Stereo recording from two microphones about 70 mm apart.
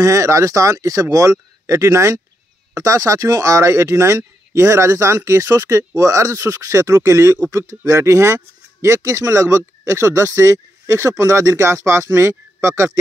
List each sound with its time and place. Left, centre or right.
0.0 s speech: right